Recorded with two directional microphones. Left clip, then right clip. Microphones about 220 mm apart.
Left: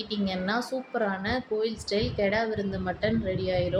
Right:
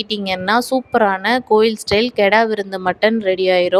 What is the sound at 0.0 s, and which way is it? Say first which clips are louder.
A woman's voice: right 11 dB; 45° right (ahead or behind).